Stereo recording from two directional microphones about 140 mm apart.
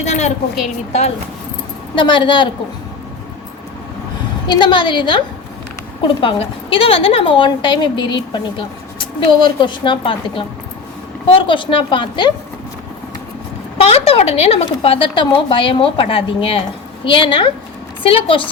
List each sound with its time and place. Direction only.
0.0 s a woman's voice: 55° left (ahead or behind)
2.0 s a woman's voice: 35° left (ahead or behind)
4.4 s a woman's voice: 35° left (ahead or behind)
13.8 s a woman's voice: 45° left (ahead or behind)